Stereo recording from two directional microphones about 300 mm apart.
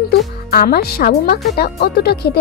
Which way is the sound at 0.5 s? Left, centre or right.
Left.